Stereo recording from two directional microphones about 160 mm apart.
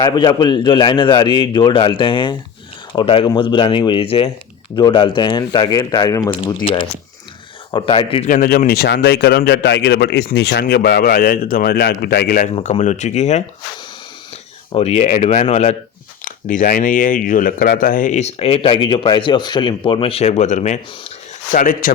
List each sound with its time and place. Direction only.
0.0 s a man's voice: 30° left (ahead or behind)
7.7 s speech: 30° left (ahead or behind)
8.3 s speech: 65° left (ahead or behind)
12.6 s speech: 50° left (ahead or behind)
14.7 s speech: 40° left (ahead or behind)
16.2 s speech: 55° left (ahead or behind)
21.5 s speech: 60° left (ahead or behind)